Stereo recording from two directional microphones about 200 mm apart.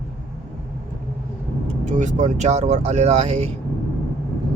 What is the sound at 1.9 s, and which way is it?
Speech, 35° right (ahead or behind).